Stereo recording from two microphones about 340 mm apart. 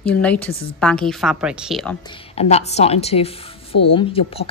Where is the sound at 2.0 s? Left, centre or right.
Centre.